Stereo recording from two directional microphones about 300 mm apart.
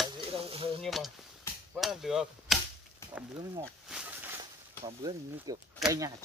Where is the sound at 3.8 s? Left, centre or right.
Centre.